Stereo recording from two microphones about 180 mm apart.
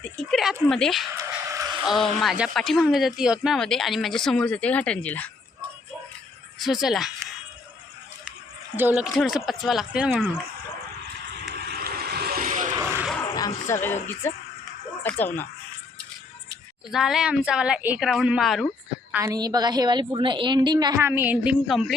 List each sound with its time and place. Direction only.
0.0 s a sound: centre (ahead or behind)
0.7 s speech: centre (ahead or behind)
1.1 s a sound: 20° right (ahead or behind)
1.8 s speech: centre (ahead or behind)
6.6 s speech: centre (ahead or behind)
8.7 s speech: 10° right (ahead or behind)
11.4 s vehicle: 65° right (ahead or behind); by 12.7 s 45° right (ahead or behind)
12.7 s a sound: 15° right (ahead or behind)
13.2 s a sound: 20° left (ahead or behind)
13.7 s speech: 15° left (ahead or behind)
16.9 s speech: 5° right (ahead or behind)
19.1 s a woman's voice: 20° right (ahead or behind); by 21.9 s centre (ahead or behind)